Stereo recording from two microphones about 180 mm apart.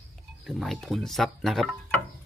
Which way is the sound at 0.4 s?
Centre (ahead or behind).